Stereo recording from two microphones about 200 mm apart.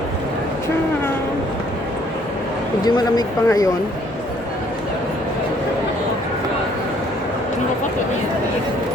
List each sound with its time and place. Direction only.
2.8 s speech: 20° left (ahead or behind)